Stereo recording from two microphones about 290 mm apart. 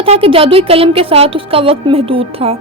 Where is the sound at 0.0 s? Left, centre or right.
Centre.